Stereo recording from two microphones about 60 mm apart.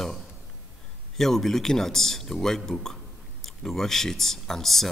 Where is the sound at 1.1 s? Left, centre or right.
Centre.